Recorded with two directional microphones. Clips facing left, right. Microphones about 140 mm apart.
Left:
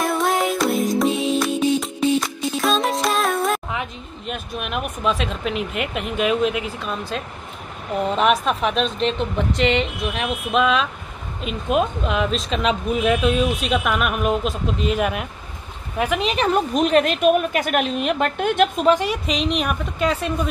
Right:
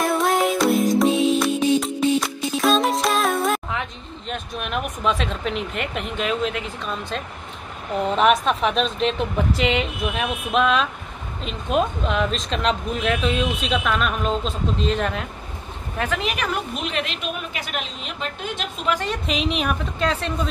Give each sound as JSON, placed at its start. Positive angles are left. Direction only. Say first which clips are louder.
{"t": 0.0, "sound": "music", "louder": "right 1 dB", "side_deg": 0}
{"t": 4.3, "sound": "speech", "louder": "even", "side_deg": 5}
{"t": 16.3, "sound": "a woman's voice", "louder": "left 8 dB", "side_deg": 40}
{"t": 19.2, "sound": "speech", "louder": "left 1 dB", "side_deg": 0}